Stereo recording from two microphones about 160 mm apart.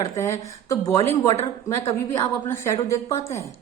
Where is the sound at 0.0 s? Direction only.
20° left (ahead or behind).